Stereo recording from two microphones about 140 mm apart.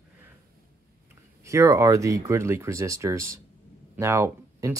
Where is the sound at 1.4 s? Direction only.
20° right (ahead or behind).